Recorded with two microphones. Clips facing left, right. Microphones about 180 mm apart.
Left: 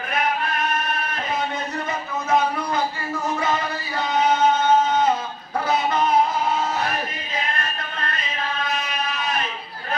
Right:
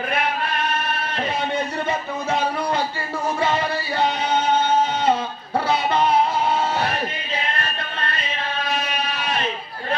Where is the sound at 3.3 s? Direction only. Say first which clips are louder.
Right 2 dB; 30° right (ahead or behind).